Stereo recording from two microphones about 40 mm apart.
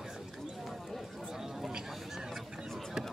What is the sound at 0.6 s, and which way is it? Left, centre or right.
Horse, centre.